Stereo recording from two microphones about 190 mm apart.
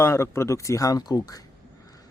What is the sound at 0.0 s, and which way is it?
Speech, 15° left (ahead or behind).